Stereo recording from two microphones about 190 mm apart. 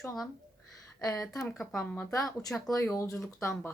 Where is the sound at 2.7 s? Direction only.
15° left (ahead or behind).